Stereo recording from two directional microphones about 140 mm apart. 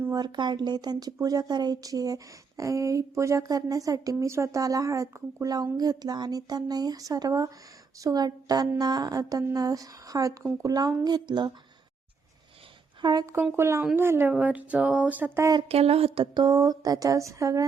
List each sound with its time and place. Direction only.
0.0 s a woman's voice: 25° right (ahead or behind)
13.0 s speech: 30° right (ahead or behind)
13.2 s speech: 15° right (ahead or behind)
15.7 s a woman's voice: 45° right (ahead or behind); by 17.7 s 25° right (ahead or behind)